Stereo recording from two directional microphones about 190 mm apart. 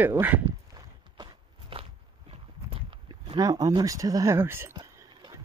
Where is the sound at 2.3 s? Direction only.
30° right (ahead or behind).